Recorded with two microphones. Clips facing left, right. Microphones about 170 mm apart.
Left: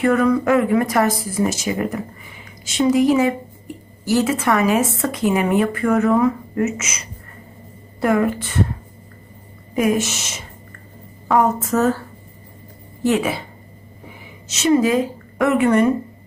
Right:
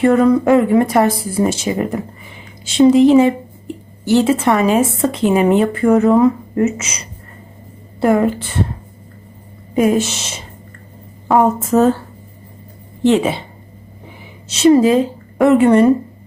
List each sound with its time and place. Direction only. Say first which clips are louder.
0.0 s a woman's voice: right 5 dB; 25° right (ahead or behind)
9.7 s a woman's voice: right 4 dB; 30° right (ahead or behind)
14.4 s a woman's voice: right 6 dB; 30° right (ahead or behind)